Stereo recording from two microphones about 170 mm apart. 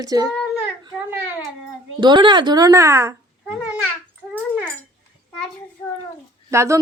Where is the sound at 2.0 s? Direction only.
25° right (ahead or behind).